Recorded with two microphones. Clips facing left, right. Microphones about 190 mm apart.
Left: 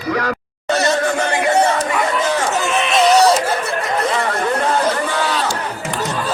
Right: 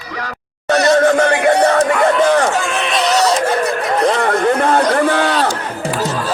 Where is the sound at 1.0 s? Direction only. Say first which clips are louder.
Right 6 dB; 60° right (ahead or behind).